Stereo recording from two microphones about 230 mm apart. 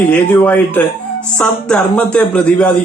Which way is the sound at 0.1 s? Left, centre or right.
Centre.